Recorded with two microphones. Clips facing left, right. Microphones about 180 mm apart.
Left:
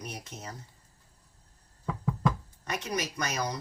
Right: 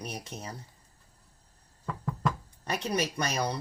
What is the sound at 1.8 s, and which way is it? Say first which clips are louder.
Knock: left 2 dB; 5° left (ahead or behind).